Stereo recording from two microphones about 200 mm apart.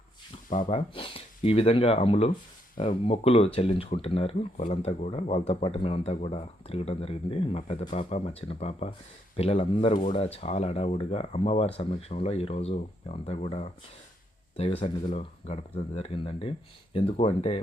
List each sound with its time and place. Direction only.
0.7 s speech: 25° left (ahead or behind)